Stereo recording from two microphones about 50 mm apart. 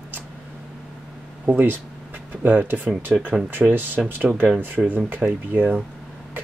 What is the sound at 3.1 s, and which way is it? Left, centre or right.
Speech, centre.